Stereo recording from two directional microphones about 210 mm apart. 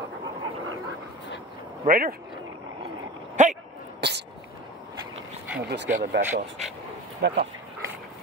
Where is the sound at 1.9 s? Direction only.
40° right (ahead or behind).